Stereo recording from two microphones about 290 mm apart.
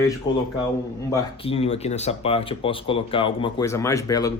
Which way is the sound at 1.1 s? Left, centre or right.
Centre.